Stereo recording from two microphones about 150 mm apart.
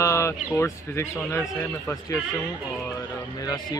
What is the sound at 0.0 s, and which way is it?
A man's voice, 20° left (ahead or behind).